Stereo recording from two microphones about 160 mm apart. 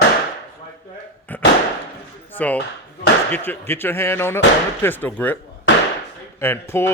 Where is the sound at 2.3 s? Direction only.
10° left (ahead or behind).